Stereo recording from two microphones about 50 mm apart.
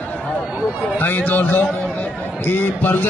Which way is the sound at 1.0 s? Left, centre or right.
Left.